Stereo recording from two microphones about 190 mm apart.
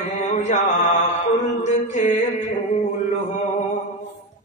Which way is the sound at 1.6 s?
40° left (ahead or behind).